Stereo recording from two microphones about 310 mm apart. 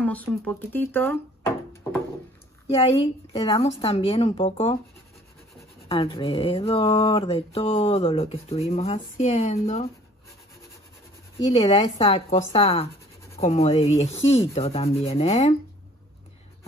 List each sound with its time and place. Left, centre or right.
0.0 s speech: centre
2.7 s speech: centre
5.9 s speech: centre
11.5 s speech: left